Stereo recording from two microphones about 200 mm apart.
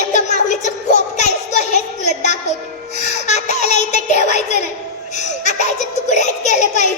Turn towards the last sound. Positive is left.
turn(degrees=35)  # may be behind; listen again after turning